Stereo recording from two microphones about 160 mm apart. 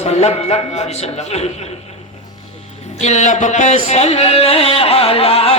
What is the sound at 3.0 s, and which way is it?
Speech, 45° left (ahead or behind).